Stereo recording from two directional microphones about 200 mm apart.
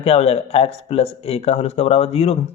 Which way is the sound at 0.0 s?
30° left (ahead or behind).